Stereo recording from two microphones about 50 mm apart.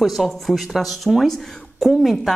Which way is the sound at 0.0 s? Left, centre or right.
Centre.